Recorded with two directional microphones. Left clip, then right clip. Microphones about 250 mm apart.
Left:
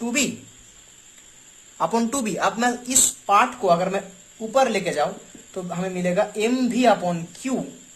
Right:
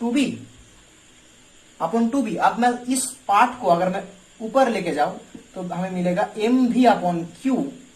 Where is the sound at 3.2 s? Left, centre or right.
Left.